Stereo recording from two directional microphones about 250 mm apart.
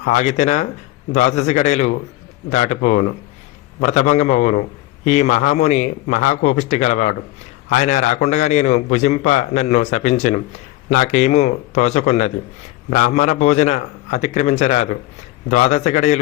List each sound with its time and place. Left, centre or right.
0.0 s a man's voice: left